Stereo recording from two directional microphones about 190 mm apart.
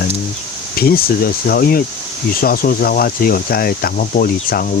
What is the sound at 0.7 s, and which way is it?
Speech, 55° left (ahead or behind).